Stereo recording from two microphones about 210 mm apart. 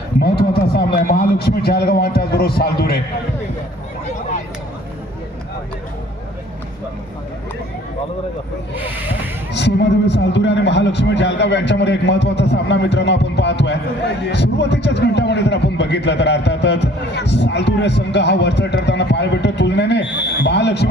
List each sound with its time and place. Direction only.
0.2 s a man's voice: 50° left (ahead or behind)
8.7 s speech: 10° right (ahead or behind)
9.5 s a man's voice: 55° left (ahead or behind)